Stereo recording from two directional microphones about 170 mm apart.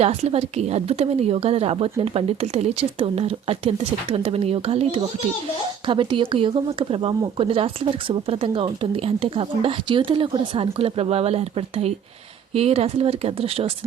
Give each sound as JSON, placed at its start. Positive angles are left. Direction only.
{"t": 0.0, "sound": "a woman's voice", "side_deg": -35}